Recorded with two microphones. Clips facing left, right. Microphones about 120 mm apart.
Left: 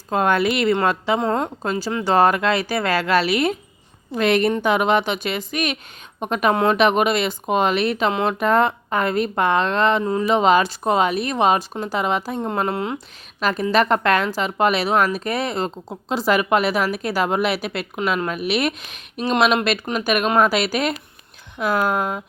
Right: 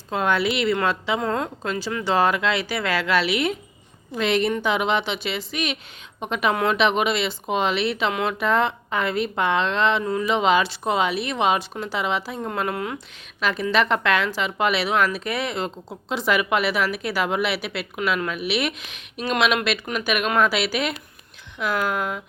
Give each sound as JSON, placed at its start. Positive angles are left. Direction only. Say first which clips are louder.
{"t": 0.1, "sound": "speech", "louder": "left 3 dB", "side_deg": 45}
{"t": 1.2, "sound": "a woman's voice", "louder": "left 3 dB", "side_deg": 30}
{"t": 4.1, "sound": "speech", "louder": "left 4 dB", "side_deg": 55}
{"t": 8.1, "sound": "a woman's voice", "louder": "left 3 dB", "side_deg": 35}
{"t": 8.4, "sound": "speech", "louder": "left 4 dB", "side_deg": 45}
{"t": 10.0, "sound": "speech", "louder": "left 4 dB", "side_deg": 35}
{"t": 12.5, "sound": "speech", "louder": "left 2 dB", "side_deg": 30}
{"t": 13.4, "sound": "a woman's voice", "louder": "left 3 dB", "side_deg": 40}
{"t": 19.8, "sound": "speech", "louder": "left 3 dB", "side_deg": 30}
{"t": 20.1, "sound": "a woman's voice", "louder": "left 3 dB", "side_deg": 40}